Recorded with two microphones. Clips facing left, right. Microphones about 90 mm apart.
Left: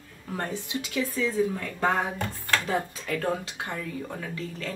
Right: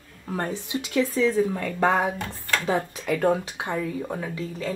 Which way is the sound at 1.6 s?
75° right (ahead or behind).